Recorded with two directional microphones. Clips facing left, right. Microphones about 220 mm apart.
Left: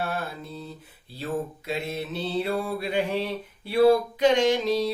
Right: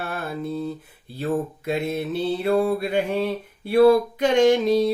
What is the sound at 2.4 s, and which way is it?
Mantra, 50° right (ahead or behind).